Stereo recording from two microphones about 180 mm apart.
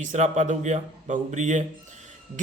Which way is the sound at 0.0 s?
45° right (ahead or behind).